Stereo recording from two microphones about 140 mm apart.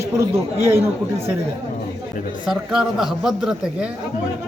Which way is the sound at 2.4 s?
5° right (ahead or behind).